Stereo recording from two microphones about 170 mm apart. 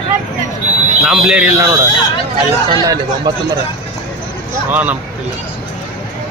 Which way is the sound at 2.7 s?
20° right (ahead or behind).